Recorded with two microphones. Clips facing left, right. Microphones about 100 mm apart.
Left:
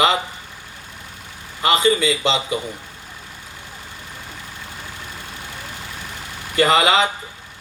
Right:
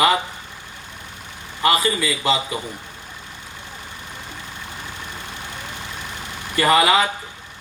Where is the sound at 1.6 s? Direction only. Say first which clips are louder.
Left 3 dB; 25° left (ahead or behind).